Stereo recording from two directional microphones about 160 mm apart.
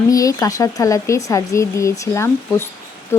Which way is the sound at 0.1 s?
20° left (ahead or behind).